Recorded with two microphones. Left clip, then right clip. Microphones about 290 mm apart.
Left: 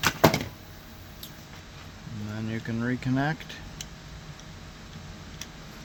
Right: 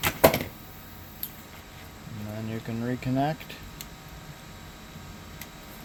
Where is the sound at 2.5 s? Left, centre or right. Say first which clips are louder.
Left 2 dB; left.